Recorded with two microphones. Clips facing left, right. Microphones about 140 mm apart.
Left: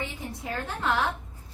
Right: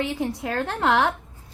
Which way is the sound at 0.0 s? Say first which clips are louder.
Right 9 dB; 80° right.